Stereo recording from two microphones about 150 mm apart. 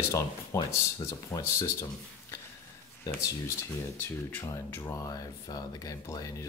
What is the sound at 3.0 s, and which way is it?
Speech, 15° left (ahead or behind).